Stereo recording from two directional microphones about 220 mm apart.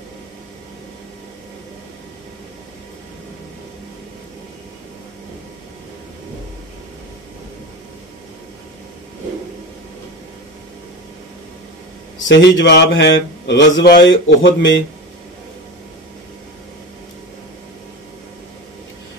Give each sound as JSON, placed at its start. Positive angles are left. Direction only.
{"t": 12.3, "sound": "speech", "side_deg": 55}